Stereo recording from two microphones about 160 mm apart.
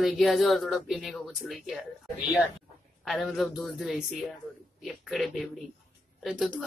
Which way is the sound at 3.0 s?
Centre (ahead or behind).